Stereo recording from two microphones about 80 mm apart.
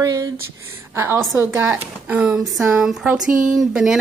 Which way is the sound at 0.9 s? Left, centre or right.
Right.